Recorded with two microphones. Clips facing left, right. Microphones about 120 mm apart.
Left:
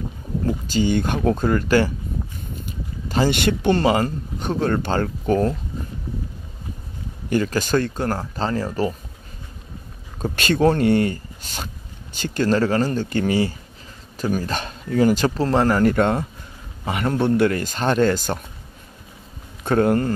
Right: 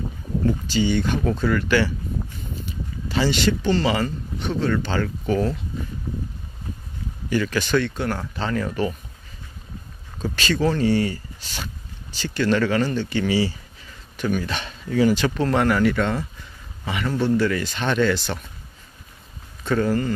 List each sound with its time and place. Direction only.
0.5 s speech: 45° left (ahead or behind)
7.2 s speech: 45° left (ahead or behind)
10.3 s speech: 55° left (ahead or behind)
14.1 s speech: 35° left (ahead or behind)
19.6 s speech: 55° left (ahead or behind)